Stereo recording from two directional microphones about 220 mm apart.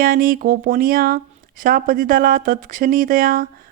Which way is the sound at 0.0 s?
40° right (ahead or behind).